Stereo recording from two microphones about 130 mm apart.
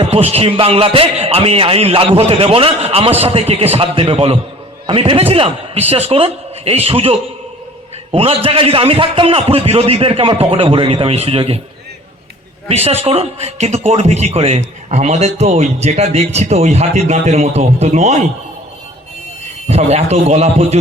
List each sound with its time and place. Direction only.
0.0 s a man's voice: 50° right (ahead or behind)
12.6 s a man's voice: 55° right (ahead or behind)
19.6 s a man's voice: 55° right (ahead or behind)